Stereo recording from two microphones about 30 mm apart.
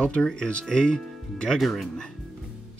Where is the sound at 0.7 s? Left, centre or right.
Left.